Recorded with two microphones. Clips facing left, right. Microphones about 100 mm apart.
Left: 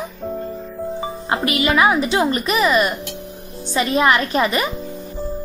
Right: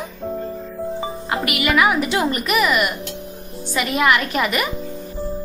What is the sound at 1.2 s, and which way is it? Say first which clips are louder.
A woman's voice: left 3 dB; 30° left (ahead or behind).